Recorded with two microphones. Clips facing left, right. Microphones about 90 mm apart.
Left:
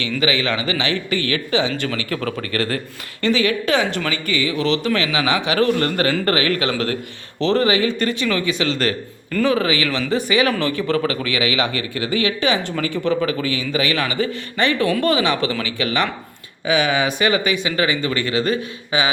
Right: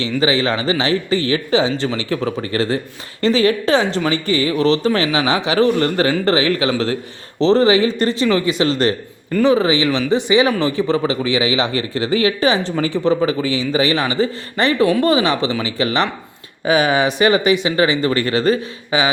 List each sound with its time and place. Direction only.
0.0 s a man's voice: 30° right (ahead or behind)
9.3 s a man's voice: 20° right (ahead or behind)